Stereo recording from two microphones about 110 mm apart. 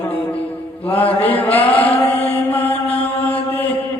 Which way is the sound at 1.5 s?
60° left (ahead or behind).